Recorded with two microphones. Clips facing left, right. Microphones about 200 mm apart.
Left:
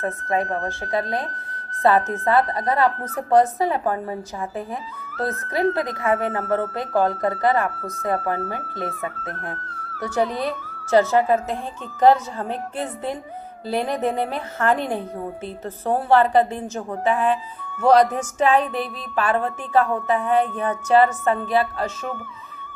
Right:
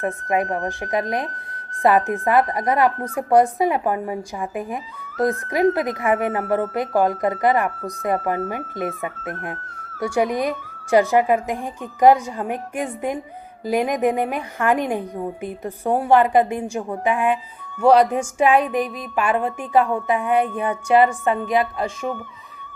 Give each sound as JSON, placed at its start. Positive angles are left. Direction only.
{"t": 0.0, "sound": "speech", "side_deg": -15}